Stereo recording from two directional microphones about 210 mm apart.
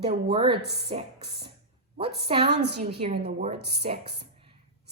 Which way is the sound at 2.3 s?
25° right (ahead or behind).